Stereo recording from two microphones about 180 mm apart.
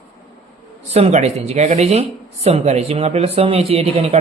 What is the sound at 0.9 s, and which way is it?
Speech, 35° right (ahead or behind).